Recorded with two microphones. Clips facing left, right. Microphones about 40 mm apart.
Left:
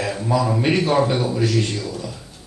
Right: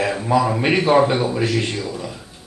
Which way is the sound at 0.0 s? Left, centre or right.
Right.